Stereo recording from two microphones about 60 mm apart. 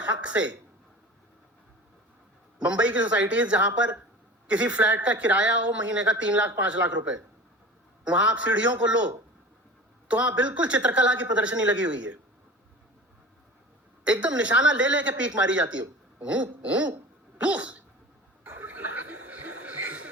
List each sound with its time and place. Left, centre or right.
0.0 s speech: right
2.6 s speech: centre
10.1 s speech: right
14.0 s speech: centre